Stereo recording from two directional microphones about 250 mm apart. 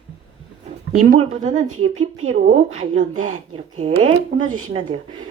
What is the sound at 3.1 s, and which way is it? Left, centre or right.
Speech, right.